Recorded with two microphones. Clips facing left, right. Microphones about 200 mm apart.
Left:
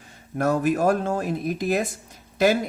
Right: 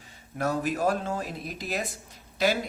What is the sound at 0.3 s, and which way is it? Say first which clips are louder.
Speech: left 6 dB; 50° left (ahead or behind).